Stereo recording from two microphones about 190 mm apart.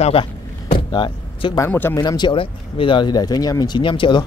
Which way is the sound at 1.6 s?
10° left (ahead or behind).